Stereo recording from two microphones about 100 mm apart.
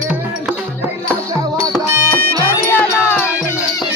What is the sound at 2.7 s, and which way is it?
Music, 20° left (ahead or behind).